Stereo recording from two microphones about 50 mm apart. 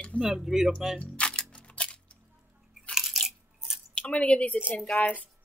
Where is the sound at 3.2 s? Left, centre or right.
Centre.